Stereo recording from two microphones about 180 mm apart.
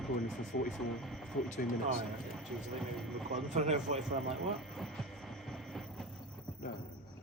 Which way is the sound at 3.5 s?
40° right (ahead or behind).